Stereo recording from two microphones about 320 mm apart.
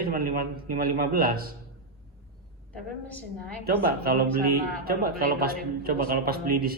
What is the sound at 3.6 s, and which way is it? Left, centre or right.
Speech, right.